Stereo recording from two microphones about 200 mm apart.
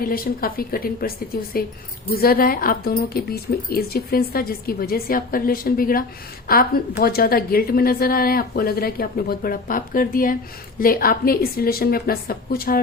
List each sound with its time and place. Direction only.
0.0 s speech: 45° left (ahead or behind)